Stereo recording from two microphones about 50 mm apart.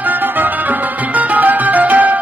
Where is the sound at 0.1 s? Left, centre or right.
Right.